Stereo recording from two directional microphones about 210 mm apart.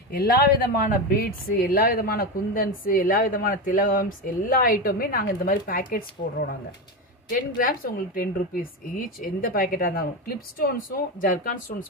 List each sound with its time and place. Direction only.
0.2 s speech: 45° left (ahead or behind)